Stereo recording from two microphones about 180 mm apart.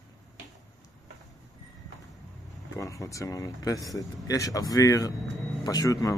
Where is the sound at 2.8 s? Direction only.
15° left (ahead or behind).